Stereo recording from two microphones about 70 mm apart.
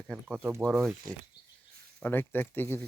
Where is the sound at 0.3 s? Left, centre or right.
Right.